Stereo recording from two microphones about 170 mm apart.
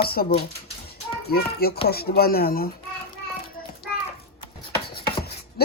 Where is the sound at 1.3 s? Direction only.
65° left (ahead or behind).